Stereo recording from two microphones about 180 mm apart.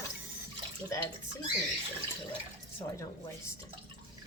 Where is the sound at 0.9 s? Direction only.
15° left (ahead or behind).